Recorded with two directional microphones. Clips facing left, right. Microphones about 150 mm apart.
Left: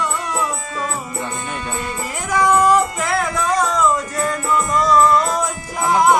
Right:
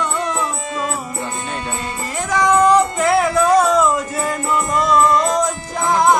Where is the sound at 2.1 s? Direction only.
10° left (ahead or behind).